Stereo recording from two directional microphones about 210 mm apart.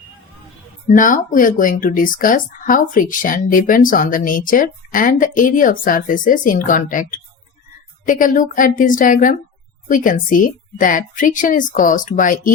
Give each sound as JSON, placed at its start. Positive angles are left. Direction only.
{"t": 0.9, "sound": "speech", "side_deg": 40}